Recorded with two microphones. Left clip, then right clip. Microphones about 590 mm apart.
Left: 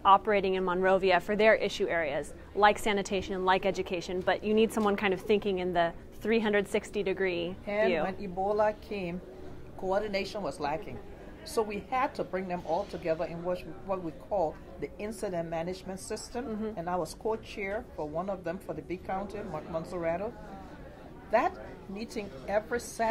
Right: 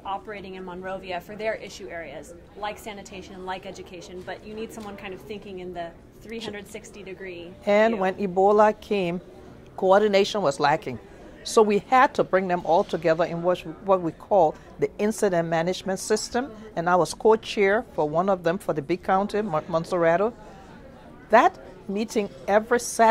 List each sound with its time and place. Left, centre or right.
0.0 s a woman's voice: left
7.6 s a woman's voice: right
9.8 s a woman's voice: right
11.5 s a woman's voice: right
21.3 s a woman's voice: right